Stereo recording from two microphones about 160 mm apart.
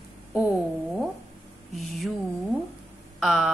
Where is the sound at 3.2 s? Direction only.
5° right (ahead or behind).